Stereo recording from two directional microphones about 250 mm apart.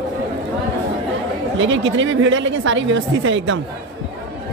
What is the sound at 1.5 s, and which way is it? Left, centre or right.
Speech, right.